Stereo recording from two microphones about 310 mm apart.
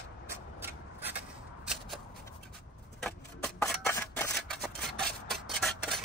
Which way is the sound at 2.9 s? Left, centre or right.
Centre.